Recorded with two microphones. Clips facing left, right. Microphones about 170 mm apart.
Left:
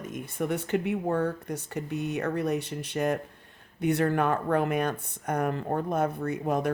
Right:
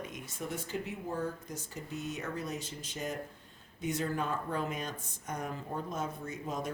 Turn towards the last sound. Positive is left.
turn(degrees=65)  # may be behind; listen again after turning